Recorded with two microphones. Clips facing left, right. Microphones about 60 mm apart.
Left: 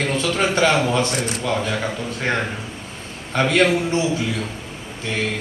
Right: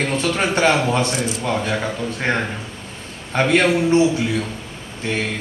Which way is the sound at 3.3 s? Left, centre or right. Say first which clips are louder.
Right 1 dB; right.